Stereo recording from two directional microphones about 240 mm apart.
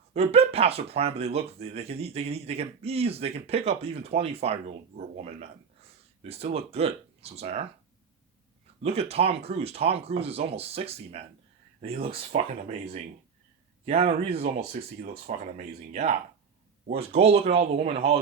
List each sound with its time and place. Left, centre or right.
0.1 s speech: right
8.8 s speech: right